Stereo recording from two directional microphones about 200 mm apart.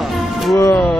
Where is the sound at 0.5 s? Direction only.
10° left (ahead or behind).